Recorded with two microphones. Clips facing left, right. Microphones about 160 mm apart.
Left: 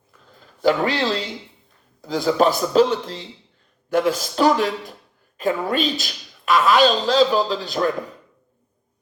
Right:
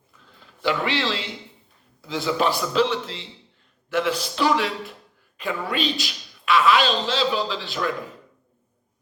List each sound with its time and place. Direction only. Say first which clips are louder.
0.3 s a man's voice: left 6 dB; 40° left (ahead or behind)